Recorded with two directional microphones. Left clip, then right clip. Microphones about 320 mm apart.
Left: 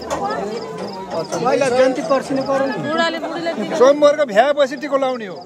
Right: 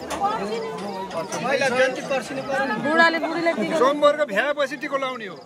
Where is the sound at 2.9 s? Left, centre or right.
Right.